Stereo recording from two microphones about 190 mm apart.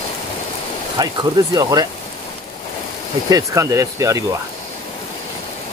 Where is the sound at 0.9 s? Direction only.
20° right (ahead or behind).